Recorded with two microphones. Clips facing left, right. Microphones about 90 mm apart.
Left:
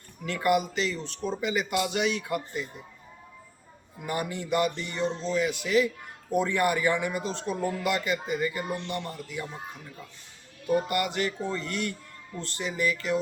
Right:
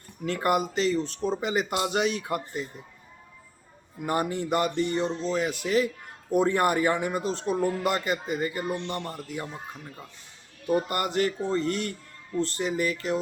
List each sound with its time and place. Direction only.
0.3 s speech: 40° right (ahead or behind)
4.0 s speech: 40° right (ahead or behind)
10.8 s speech: 40° right (ahead or behind)